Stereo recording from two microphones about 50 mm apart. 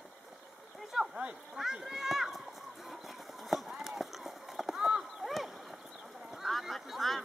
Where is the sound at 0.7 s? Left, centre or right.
Centre.